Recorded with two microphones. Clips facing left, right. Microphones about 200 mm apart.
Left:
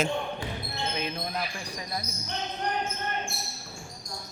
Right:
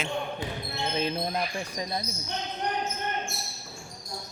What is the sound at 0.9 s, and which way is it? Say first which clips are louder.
Basketball bounce: right 7 dB; 30° right (ahead or behind).